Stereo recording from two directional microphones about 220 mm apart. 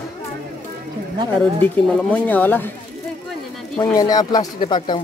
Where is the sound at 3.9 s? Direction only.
15° left (ahead or behind).